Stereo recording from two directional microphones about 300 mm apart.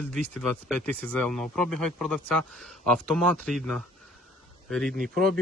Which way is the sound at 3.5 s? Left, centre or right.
Centre.